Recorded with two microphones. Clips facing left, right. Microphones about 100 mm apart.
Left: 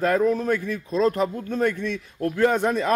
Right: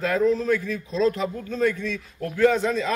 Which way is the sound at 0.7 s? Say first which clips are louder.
Left 1 dB; 55° left (ahead or behind).